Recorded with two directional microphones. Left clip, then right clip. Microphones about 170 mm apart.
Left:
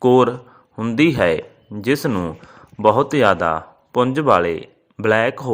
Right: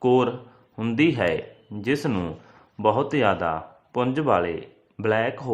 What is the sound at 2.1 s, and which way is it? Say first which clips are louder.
Speech: left 5 dB; 5° left (ahead or behind).